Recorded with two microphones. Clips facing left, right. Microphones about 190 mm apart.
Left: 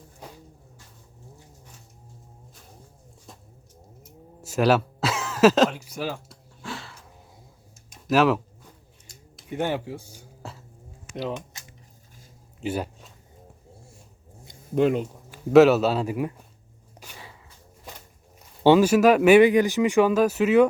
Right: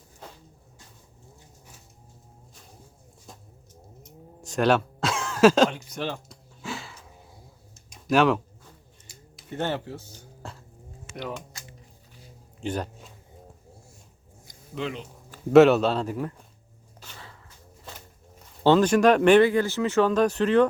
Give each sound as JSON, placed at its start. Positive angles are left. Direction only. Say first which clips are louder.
{"t": 4.0, "sound": "a sound", "louder": "even", "side_deg": 5}
{"t": 6.6, "sound": "a sound", "louder": "right 1 dB", "side_deg": -5}
{"t": 9.5, "sound": "speech", "louder": "left 2 dB", "side_deg": 10}
{"t": 11.3, "sound": "speech", "louder": "left 2 dB", "side_deg": 20}
{"t": 12.5, "sound": "speech", "louder": "left 2 dB", "side_deg": 5}
{"t": 14.8, "sound": "speech", "louder": "left 11 dB", "side_deg": 50}
{"t": 15.5, "sound": "speech", "louder": "even", "side_deg": 0}
{"t": 17.0, "sound": "a sound", "louder": "left 1 dB", "side_deg": 10}
{"t": 18.6, "sound": "speech", "louder": "left 2 dB", "side_deg": 10}